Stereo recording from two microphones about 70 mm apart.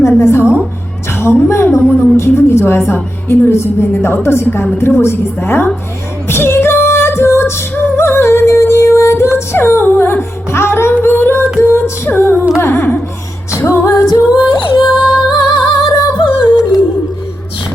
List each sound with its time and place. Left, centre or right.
0.2 s a woman's voice: left
6.2 s music: left
11.0 s singing: left
11.6 s female singing: left
12.5 s music: left
14.1 s female singing: left
15.3 s music: left